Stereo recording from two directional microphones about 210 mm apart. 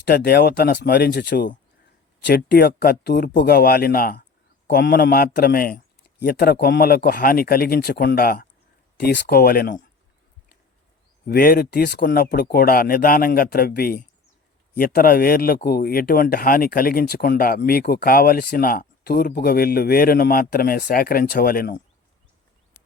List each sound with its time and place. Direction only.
0.0 s speech: 50° left (ahead or behind)
11.3 s speech: 45° left (ahead or behind)